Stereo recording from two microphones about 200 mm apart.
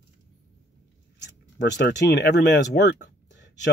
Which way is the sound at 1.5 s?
60° left (ahead or behind).